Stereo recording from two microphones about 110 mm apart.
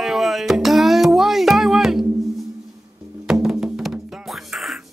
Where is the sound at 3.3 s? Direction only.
5° right (ahead or behind).